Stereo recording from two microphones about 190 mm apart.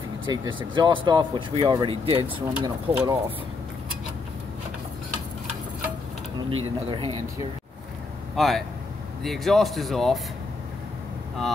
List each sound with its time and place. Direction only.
0.3 s speech: 25° right (ahead or behind)
6.6 s speech: 30° right (ahead or behind)
8.4 s speech: centre (ahead or behind)